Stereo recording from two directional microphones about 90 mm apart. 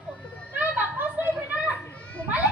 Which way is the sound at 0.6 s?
20° right (ahead or behind).